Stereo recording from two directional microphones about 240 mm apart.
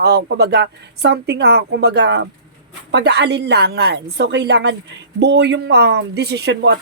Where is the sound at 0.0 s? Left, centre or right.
Right.